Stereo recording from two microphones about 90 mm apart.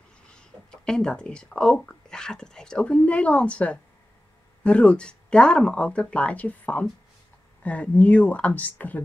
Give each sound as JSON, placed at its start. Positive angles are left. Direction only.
{"t": 0.4, "sound": "speech", "side_deg": 10}